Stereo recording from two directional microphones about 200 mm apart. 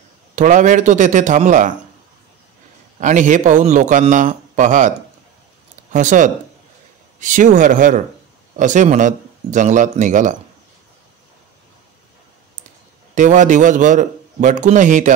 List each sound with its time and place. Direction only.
0.4 s a man's voice: 40° right (ahead or behind)
3.0 s a man's voice: 40° right (ahead or behind)
13.1 s a man's voice: 40° right (ahead or behind)